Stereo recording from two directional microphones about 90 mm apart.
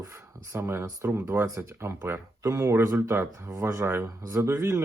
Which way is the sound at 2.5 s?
40° right (ahead or behind).